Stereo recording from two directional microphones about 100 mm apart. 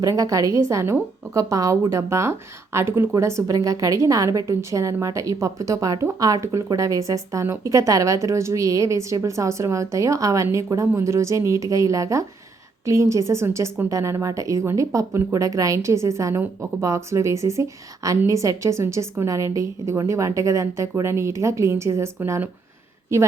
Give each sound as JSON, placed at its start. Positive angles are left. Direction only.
{"t": 0.0, "sound": "a woman's voice", "side_deg": -35}